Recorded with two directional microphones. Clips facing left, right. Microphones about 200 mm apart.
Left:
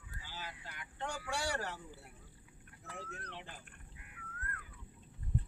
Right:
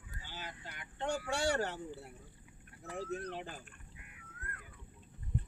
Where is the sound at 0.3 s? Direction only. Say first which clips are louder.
Right 1 dB; 20° right (ahead or behind).